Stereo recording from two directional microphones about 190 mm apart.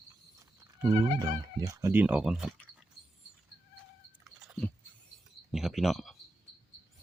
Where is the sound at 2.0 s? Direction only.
5° right (ahead or behind).